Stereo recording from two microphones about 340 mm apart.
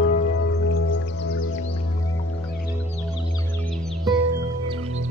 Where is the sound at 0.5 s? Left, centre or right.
Left.